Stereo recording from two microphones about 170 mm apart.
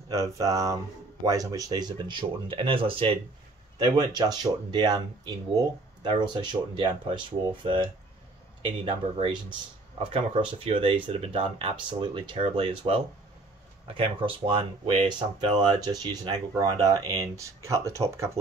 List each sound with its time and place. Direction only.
0.1 s speech: 20° right (ahead or behind)